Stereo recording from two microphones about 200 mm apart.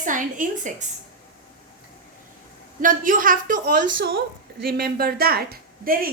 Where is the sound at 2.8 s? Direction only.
45° right (ahead or behind).